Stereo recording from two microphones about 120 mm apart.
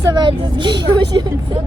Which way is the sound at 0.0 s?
35° right (ahead or behind).